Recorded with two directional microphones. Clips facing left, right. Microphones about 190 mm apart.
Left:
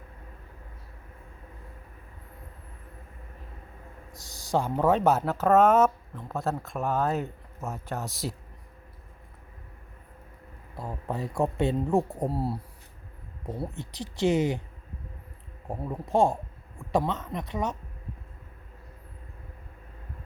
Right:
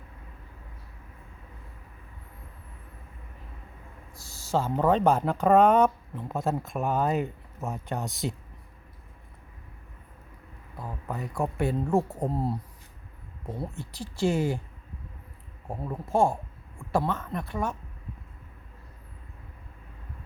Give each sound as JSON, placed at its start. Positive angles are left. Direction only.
{"t": 4.1, "sound": "speech", "side_deg": 15}
{"t": 10.8, "sound": "speech", "side_deg": 30}
{"t": 13.6, "sound": "speech", "side_deg": 20}
{"t": 15.8, "sound": "speech", "side_deg": 15}